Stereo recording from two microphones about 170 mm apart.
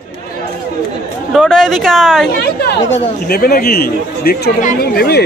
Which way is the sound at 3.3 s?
65° left (ahead or behind).